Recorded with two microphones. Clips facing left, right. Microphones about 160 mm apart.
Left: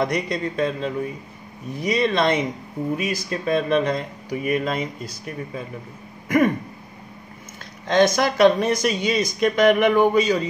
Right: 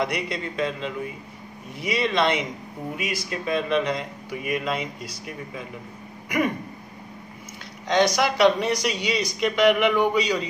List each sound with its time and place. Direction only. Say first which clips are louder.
0.0 s speech: left 4 dB; 35° left (ahead or behind)
7.9 s speech: left 3 dB; 50° left (ahead or behind)